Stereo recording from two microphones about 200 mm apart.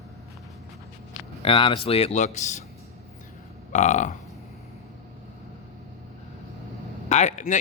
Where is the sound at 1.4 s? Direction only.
25° left (ahead or behind).